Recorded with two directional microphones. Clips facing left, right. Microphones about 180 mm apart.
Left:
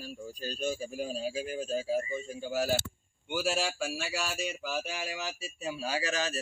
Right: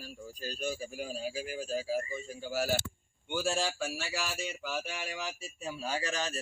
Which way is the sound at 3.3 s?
10° left (ahead or behind).